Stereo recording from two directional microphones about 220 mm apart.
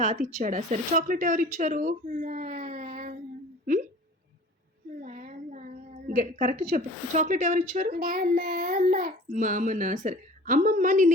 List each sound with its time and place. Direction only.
0.0 s a woman's voice: 35° right (ahead or behind)
4.9 s a sound: 35° right (ahead or behind)
6.1 s a woman's voice: 35° right (ahead or behind)